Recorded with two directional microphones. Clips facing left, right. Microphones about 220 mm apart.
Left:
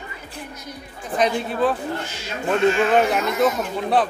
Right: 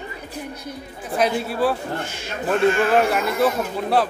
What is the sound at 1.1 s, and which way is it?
A man's voice, 5° right (ahead or behind).